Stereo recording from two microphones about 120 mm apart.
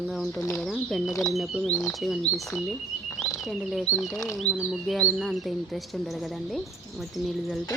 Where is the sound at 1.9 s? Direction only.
Centre (ahead or behind).